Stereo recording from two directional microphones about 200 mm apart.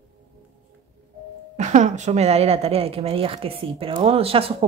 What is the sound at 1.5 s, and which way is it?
A woman's voice, 35° right (ahead or behind).